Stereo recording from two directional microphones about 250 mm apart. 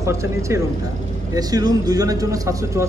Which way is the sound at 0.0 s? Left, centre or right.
Centre.